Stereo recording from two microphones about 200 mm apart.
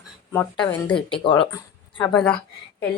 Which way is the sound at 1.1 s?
25° left (ahead or behind).